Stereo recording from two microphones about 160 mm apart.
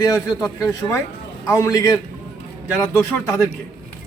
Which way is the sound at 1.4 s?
20° left (ahead or behind).